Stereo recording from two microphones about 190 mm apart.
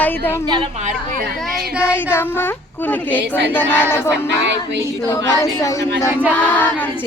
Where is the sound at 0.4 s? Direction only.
25° right (ahead or behind).